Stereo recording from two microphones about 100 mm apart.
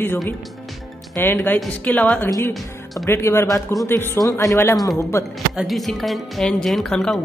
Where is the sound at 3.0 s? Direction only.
25° left (ahead or behind).